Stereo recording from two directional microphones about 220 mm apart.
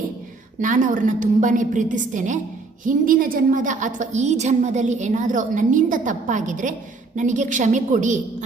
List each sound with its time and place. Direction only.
0.6 s a woman's voice: 35° right (ahead or behind)